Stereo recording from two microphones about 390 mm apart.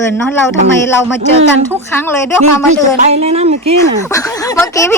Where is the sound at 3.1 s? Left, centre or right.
Centre.